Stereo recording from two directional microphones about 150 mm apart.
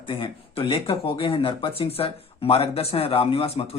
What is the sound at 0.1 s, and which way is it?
Speech, 35° left (ahead or behind).